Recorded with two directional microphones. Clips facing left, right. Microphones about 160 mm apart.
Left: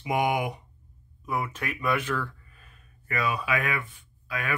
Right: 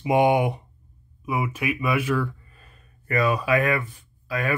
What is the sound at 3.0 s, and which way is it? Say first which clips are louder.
Speech: right 6 dB; 40° right (ahead or behind).